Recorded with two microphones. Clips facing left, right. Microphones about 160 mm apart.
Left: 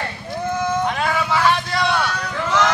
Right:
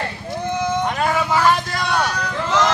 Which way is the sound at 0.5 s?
20° right (ahead or behind).